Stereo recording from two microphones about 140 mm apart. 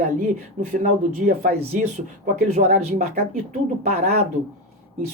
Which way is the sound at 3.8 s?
90° right.